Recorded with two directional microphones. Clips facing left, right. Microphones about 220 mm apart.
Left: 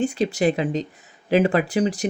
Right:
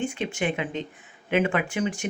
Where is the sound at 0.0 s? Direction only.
35° left (ahead or behind).